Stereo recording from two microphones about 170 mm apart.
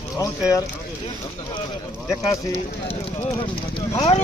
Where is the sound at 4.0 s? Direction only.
35° left (ahead or behind).